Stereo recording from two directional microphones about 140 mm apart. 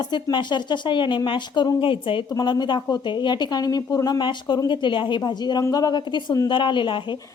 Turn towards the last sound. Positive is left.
turn(degrees=35)  # may be behind; listen again after turning